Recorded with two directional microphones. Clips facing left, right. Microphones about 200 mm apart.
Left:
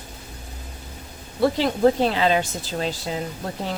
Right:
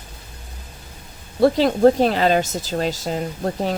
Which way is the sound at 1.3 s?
45° right (ahead or behind).